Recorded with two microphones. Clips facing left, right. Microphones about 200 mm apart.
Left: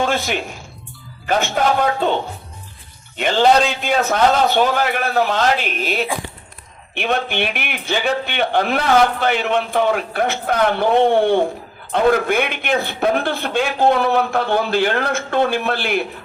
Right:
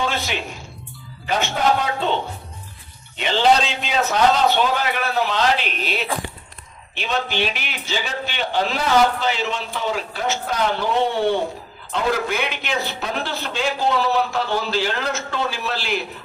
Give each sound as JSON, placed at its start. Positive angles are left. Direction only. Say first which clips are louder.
{"t": 0.0, "sound": "a man's voice", "louder": "left 5 dB", "side_deg": 50}
{"t": 3.2, "sound": "a man's voice", "louder": "left 3 dB", "side_deg": 50}